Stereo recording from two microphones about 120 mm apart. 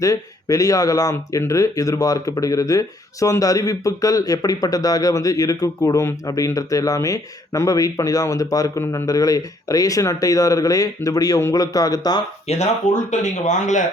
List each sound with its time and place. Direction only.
0.0 s speech: 30° left (ahead or behind)
12.5 s speech: 70° left (ahead or behind); by 13.8 s 90° left